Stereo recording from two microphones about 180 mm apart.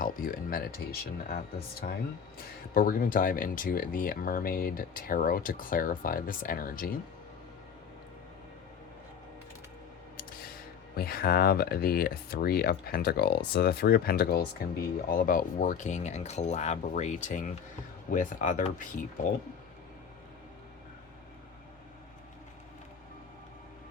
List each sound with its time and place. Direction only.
0.0 s a sound: 50° left (ahead or behind)
1.8 s speech: 60° left (ahead or behind)
10.9 s speech: 55° left (ahead or behind)